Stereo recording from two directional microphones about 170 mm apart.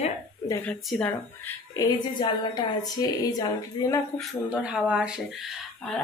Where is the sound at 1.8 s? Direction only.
25° left (ahead or behind).